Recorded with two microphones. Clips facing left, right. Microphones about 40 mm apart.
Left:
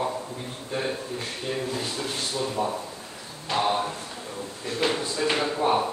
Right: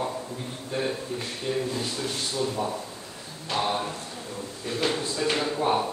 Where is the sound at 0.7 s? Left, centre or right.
Centre.